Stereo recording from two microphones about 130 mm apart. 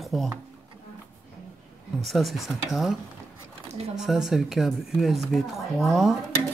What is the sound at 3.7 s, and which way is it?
Speech, 55° right (ahead or behind).